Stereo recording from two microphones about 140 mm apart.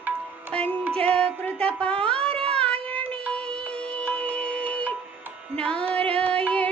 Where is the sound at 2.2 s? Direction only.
45° right (ahead or behind).